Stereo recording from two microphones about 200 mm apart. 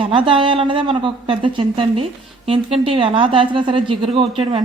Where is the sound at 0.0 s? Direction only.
25° right (ahead or behind).